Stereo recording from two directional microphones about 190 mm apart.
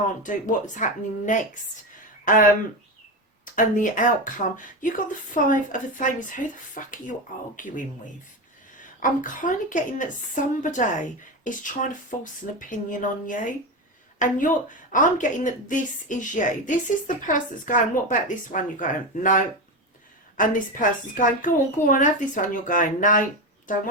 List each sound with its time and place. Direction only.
0.2 s speech: 40° left (ahead or behind)
3.4 s speech: 45° left (ahead or behind)
9.0 s speech: 45° left (ahead or behind)